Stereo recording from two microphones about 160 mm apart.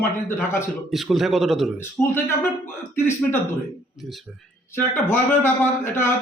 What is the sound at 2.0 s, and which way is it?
Speech, 15° left (ahead or behind).